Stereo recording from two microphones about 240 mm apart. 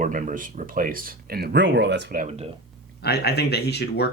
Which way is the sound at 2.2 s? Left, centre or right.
Right.